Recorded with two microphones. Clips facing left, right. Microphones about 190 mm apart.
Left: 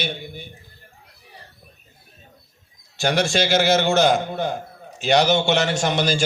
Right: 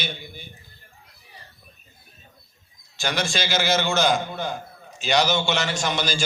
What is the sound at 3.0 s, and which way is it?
A man's voice, 60° left (ahead or behind).